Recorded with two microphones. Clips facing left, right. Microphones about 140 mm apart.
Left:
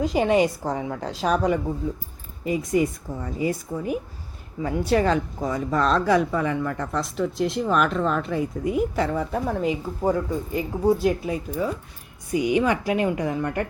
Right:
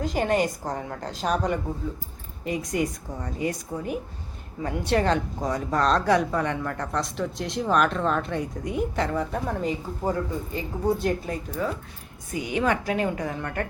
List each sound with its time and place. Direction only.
0.0 s speech: 5° left (ahead or behind)
10.0 s speech: 15° left (ahead or behind)